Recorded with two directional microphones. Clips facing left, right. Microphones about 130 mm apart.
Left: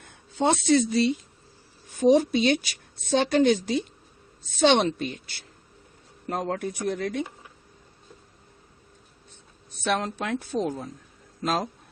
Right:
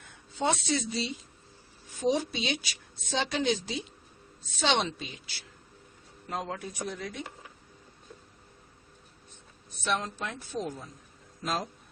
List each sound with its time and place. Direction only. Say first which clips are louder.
0.1 s a woman's voice: left 6 dB; 55° left (ahead or behind); by 7.3 s 75° left (ahead or behind)
9.8 s a woman's voice: left 5 dB; 65° left (ahead or behind)